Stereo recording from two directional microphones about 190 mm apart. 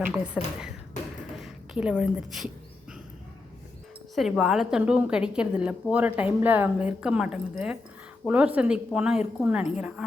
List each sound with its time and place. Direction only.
0.0 s speech: 5° right (ahead or behind)
1.4 s a woman's voice: 5° right (ahead or behind)
4.1 s a woman's voice: centre (ahead or behind)